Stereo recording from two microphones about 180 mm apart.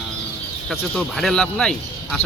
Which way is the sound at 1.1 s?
5° left (ahead or behind).